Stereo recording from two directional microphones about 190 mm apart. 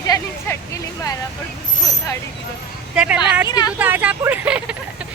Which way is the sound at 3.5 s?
20° left (ahead or behind).